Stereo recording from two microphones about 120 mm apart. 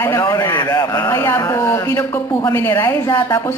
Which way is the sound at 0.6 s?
30° left (ahead or behind).